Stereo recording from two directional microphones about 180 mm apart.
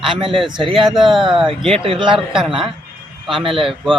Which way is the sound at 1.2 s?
30° right (ahead or behind).